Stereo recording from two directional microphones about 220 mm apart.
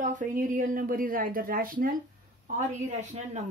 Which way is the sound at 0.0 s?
35° right (ahead or behind).